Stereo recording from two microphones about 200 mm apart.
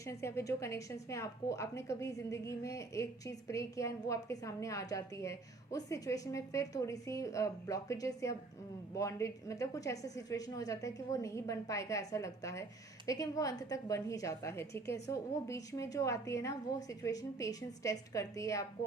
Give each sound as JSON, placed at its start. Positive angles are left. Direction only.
{"t": 0.0, "sound": "a woman's voice", "side_deg": 15}